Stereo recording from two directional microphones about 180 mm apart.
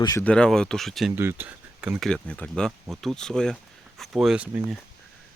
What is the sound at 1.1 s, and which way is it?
Speech, 10° right (ahead or behind).